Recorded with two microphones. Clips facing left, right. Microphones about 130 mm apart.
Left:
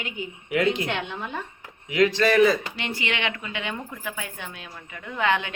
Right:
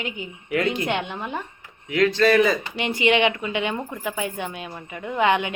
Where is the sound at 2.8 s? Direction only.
20° right (ahead or behind).